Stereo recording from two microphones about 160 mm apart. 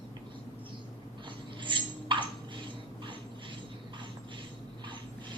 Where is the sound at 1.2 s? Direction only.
30° right (ahead or behind).